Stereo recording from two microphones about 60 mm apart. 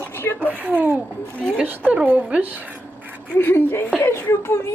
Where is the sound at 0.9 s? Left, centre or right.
Centre.